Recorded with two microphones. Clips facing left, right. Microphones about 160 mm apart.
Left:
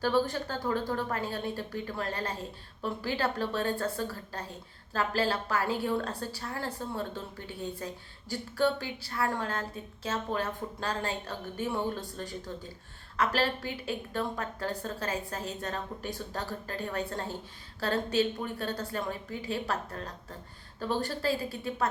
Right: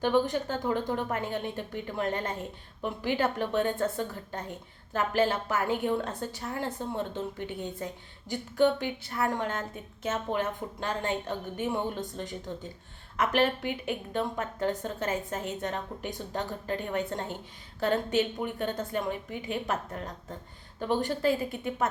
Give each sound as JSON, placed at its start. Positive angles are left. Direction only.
{"t": 0.0, "sound": "a woman's voice", "side_deg": -20}